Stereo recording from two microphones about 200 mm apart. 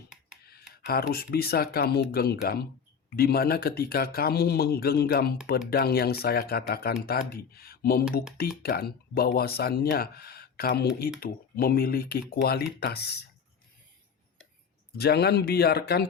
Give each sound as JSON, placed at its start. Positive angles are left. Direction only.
{"t": 0.9, "sound": "speech", "side_deg": 50}
{"t": 14.9, "sound": "speech", "side_deg": 55}